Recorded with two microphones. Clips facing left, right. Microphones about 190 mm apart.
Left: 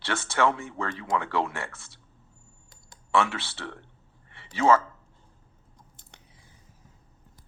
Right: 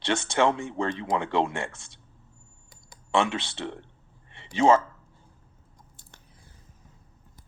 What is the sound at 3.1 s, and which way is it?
Speech, 20° right (ahead or behind).